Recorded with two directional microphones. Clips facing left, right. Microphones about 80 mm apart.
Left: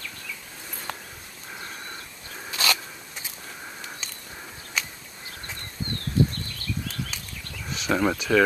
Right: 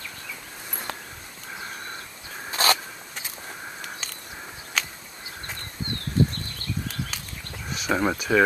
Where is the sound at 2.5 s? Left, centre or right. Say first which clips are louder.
Right 4 dB; right.